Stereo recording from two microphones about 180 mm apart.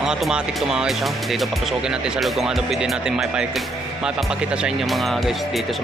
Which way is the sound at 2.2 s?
Centre (ahead or behind).